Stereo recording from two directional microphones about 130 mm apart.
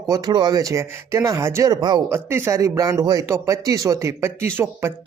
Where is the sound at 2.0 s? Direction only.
20° right (ahead or behind).